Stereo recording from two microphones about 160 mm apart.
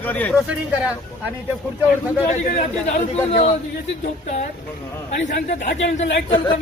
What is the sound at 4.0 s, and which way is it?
A man's voice, 50° left (ahead or behind).